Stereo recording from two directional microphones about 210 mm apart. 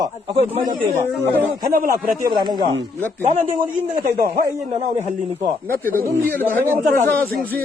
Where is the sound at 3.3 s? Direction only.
35° right (ahead or behind).